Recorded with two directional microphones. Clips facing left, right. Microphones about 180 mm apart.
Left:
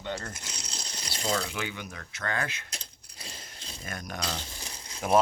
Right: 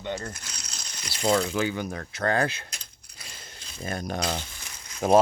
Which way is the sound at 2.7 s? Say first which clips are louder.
Left 2 dB; 30° left (ahead or behind).